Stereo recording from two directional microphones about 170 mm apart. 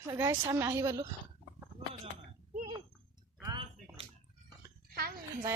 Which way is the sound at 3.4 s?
25° right (ahead or behind).